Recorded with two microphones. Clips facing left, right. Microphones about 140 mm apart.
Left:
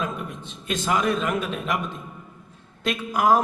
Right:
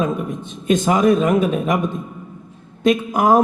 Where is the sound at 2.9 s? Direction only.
45° right (ahead or behind).